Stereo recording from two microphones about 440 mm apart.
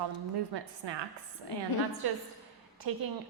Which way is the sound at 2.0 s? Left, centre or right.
Right.